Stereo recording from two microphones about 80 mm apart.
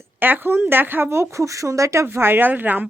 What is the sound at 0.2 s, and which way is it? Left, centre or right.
Speech, right.